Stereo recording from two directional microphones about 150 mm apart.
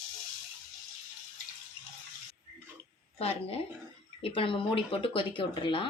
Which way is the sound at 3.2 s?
40° left (ahead or behind).